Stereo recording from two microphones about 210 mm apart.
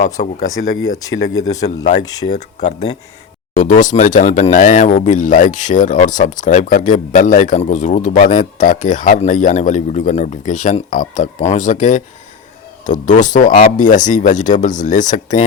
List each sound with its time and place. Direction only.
0.0 s speech: 35° left (ahead or behind)
0.7 s speech: 70° left (ahead or behind)
1.4 s a man's voice: 15° left (ahead or behind)
2.3 s speech: 35° left (ahead or behind)